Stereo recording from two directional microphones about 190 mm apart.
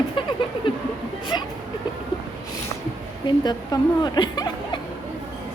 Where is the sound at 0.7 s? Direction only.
25° left (ahead or behind).